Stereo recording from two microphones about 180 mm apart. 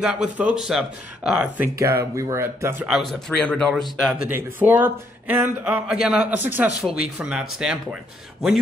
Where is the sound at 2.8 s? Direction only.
Centre (ahead or behind).